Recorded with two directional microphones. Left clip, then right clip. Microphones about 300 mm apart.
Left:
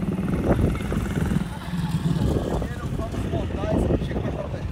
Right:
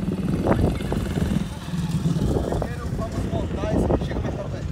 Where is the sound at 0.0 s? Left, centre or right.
Centre.